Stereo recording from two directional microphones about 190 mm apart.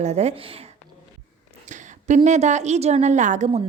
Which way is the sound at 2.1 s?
35° right (ahead or behind).